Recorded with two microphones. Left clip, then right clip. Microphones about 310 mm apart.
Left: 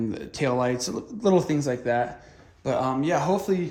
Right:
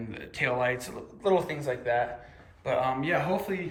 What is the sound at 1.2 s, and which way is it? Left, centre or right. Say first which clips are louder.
Speech: left 4 dB; left.